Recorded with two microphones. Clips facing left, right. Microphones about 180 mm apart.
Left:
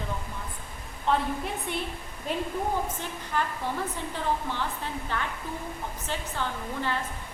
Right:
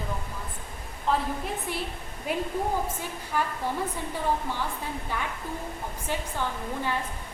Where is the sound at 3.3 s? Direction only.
10° right (ahead or behind).